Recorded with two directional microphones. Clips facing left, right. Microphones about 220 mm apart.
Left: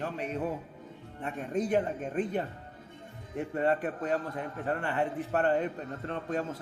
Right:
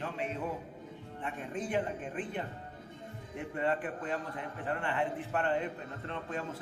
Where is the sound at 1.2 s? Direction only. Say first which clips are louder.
Left 6 dB; 40° left (ahead or behind).